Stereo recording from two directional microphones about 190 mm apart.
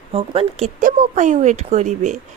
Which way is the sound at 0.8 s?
45° right (ahead or behind).